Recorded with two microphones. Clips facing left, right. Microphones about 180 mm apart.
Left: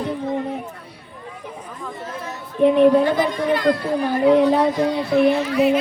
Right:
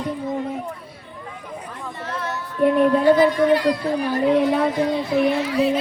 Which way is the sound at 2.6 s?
90° left.